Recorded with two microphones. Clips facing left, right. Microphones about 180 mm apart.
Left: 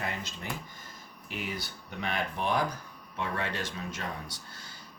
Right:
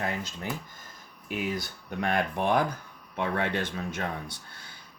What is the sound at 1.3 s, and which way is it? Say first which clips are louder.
Speech: right 6 dB; 45° right (ahead or behind).